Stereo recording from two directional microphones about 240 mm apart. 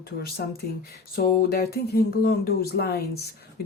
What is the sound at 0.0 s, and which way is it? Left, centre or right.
Speech, left.